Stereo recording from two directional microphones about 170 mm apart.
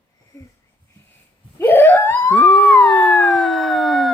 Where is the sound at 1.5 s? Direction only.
10° left (ahead or behind).